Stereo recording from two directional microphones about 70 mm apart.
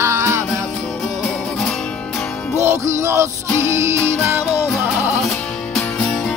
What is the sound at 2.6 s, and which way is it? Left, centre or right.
Music, right.